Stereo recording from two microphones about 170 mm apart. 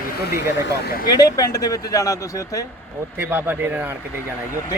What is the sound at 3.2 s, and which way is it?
Speech, 10° right (ahead or behind).